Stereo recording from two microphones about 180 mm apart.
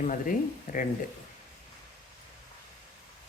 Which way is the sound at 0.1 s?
50° left (ahead or behind).